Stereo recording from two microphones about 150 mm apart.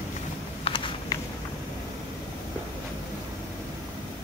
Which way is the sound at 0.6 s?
35° left (ahead or behind).